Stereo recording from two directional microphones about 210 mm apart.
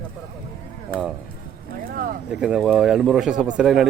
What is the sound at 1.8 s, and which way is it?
Speech, 45° right (ahead or behind).